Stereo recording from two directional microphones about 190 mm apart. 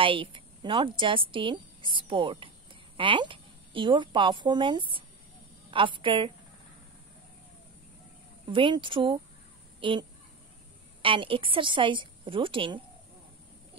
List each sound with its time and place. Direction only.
0.0 s a woman's voice: 25° right (ahead or behind)
8.5 s a woman's voice: 25° right (ahead or behind)